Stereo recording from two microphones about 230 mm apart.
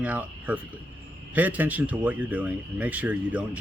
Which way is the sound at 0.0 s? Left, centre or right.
Centre.